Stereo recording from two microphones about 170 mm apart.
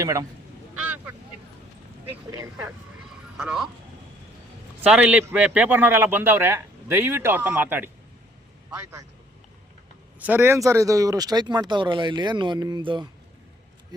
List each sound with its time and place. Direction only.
0.0 s speech: 20° right (ahead or behind)
0.8 s a sound: 10° right (ahead or behind)
2.3 s a man's voice: 15° right (ahead or behind)
3.0 s a sound: 5° right (ahead or behind)
4.8 s a man's voice: 10° right (ahead or behind)
10.2 s speech: 10° right (ahead or behind); by 13.1 s 25° right (ahead or behind)